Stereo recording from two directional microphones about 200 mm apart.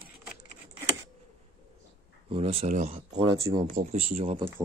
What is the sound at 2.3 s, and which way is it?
Speech, 30° right (ahead or behind).